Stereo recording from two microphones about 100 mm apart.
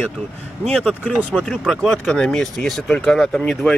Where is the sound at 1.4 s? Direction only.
5° left (ahead or behind).